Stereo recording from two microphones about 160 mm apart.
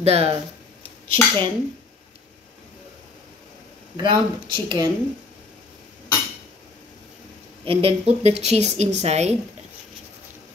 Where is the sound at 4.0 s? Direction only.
30° right (ahead or behind).